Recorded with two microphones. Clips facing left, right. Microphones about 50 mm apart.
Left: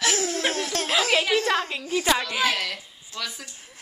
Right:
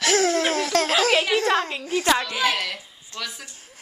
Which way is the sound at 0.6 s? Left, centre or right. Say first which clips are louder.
Right 6 dB; right.